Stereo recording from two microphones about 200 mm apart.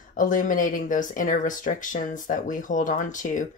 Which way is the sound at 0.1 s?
40° left (ahead or behind).